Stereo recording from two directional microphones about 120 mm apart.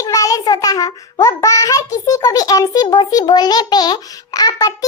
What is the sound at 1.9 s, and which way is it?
A child's voice, 30° left (ahead or behind).